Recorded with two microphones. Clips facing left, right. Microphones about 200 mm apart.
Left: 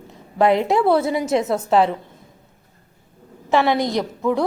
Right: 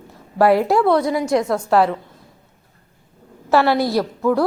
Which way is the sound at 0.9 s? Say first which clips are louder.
Right 1 dB; 25° left (ahead or behind).